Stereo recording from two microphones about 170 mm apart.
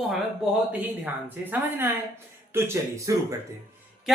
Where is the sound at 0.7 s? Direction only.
10° right (ahead or behind).